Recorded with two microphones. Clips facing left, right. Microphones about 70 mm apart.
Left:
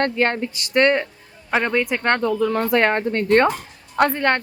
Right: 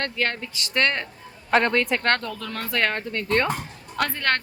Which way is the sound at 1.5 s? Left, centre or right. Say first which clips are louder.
Even; centre.